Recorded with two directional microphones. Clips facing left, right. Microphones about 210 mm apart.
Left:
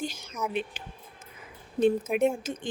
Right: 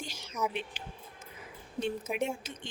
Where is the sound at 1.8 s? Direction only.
50° left (ahead or behind).